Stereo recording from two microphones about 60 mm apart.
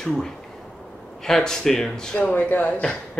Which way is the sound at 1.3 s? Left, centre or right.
Centre.